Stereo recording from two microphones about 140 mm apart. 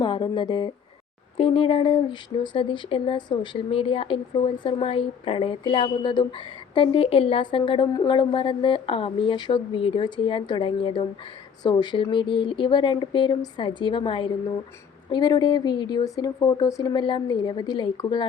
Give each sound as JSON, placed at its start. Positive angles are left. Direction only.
{"t": 0.0, "sound": "a woman's voice", "side_deg": 35}